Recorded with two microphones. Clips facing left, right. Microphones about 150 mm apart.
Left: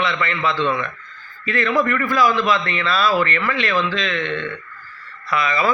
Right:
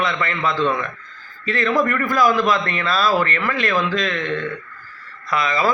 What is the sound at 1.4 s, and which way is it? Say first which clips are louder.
A man's voice: even; 35° right (ahead or behind).